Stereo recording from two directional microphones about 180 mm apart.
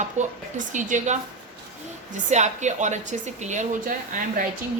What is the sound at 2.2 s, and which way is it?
Speech, 40° right (ahead or behind).